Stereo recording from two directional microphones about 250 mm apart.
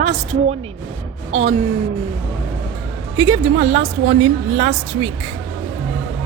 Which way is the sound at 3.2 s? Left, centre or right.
Right.